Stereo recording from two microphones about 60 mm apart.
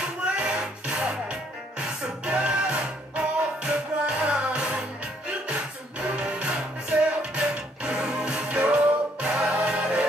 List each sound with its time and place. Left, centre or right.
0.2 s music: centre